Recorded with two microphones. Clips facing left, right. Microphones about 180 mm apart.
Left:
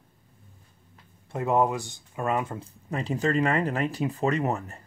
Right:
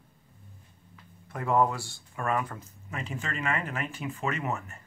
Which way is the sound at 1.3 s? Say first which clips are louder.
Left 2 dB; 20° left (ahead or behind).